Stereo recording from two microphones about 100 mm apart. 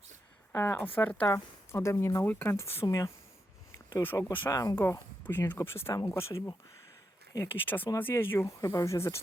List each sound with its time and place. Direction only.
0.5 s speech: 20° left (ahead or behind)
1.3 s speech: 30° left (ahead or behind)
2.8 s speech: 35° left (ahead or behind)
4.0 s speech: 20° left (ahead or behind)
7.5 s speech: 20° left (ahead or behind)